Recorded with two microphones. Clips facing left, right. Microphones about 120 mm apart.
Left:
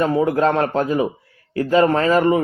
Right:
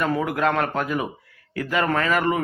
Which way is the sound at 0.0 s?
30° left (ahead or behind).